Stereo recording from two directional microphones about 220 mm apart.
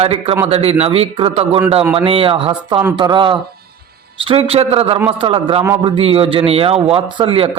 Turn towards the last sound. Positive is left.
turn(degrees=-25)  # may be behind; listen again after turning